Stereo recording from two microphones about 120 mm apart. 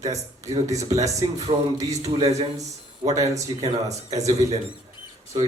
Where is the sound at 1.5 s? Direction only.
75° right (ahead or behind).